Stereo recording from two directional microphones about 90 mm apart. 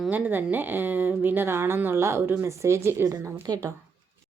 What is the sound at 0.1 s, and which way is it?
Speech, 20° right (ahead or behind).